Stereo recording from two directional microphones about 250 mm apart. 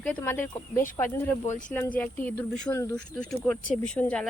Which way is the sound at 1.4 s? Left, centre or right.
Left.